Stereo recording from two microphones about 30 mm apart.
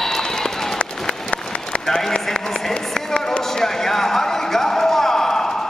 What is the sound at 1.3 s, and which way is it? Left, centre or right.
Run, left.